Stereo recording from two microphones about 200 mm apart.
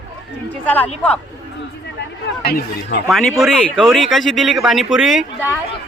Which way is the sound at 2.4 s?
50° left (ahead or behind).